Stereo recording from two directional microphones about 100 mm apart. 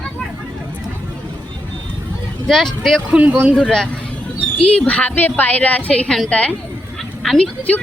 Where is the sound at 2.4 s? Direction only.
5° left (ahead or behind).